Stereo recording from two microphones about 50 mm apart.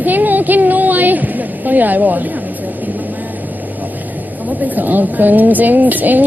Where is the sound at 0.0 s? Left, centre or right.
Right.